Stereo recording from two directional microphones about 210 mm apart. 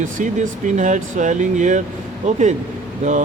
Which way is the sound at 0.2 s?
35° right (ahead or behind).